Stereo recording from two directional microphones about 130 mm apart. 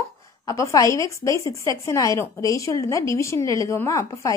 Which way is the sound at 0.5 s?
25° left (ahead or behind).